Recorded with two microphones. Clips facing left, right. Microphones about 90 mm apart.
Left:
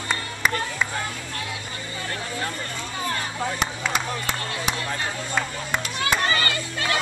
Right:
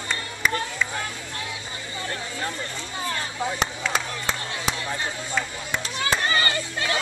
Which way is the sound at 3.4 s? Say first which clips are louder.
Right 1 dB; 5° left (ahead or behind).